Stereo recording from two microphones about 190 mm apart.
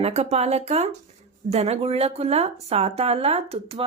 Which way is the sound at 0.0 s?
35° right (ahead or behind).